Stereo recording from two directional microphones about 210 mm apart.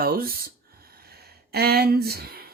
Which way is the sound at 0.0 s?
45° right (ahead or behind).